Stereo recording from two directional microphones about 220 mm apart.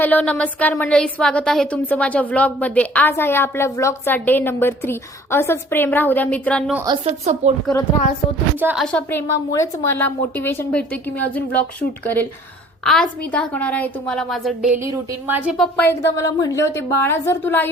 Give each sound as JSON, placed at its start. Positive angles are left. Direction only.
{"t": 0.0, "sound": "speech", "side_deg": 5}
{"t": 6.7, "sound": "a woman's voice", "side_deg": -20}
{"t": 7.0, "sound": "speech", "side_deg": -30}
{"t": 8.6, "sound": "a woman's voice", "side_deg": 0}